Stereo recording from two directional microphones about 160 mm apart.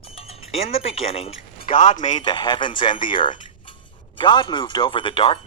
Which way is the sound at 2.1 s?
30° left (ahead or behind).